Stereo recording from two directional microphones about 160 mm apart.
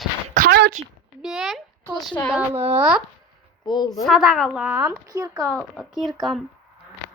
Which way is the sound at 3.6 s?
25° left (ahead or behind).